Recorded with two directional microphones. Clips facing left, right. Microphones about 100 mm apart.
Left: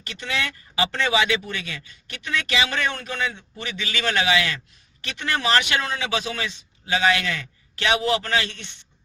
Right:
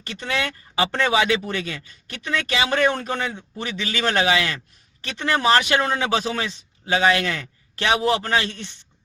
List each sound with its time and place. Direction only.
0.1 s speech: 40° right (ahead or behind)